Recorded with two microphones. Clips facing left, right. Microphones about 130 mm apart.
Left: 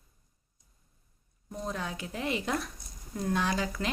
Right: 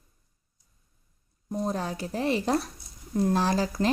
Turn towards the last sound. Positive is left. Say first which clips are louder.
# right 5 dB
turn(degrees=-35)  # may be behind; listen again after turning